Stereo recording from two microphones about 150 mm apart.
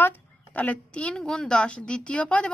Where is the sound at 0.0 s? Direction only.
10° left (ahead or behind).